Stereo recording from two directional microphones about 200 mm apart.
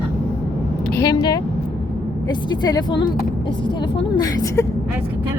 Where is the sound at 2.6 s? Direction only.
20° left (ahead or behind).